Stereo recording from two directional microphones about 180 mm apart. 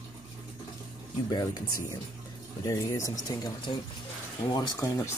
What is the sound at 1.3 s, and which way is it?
Speech, 20° left (ahead or behind).